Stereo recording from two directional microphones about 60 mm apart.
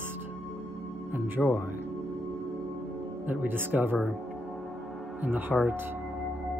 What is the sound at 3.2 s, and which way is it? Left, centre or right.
Speech, right.